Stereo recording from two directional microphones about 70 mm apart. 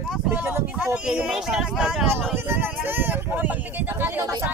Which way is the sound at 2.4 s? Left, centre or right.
Right.